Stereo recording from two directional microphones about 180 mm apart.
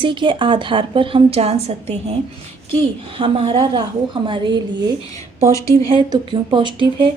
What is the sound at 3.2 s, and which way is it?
A woman's voice, 30° right (ahead or behind).